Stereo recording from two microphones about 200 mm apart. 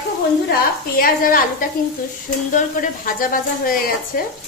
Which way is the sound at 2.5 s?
40° left (ahead or behind).